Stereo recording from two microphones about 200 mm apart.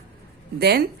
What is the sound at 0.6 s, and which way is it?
Speech, 55° right (ahead or behind).